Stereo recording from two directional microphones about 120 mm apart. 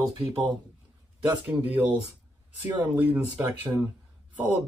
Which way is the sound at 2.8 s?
15° right (ahead or behind).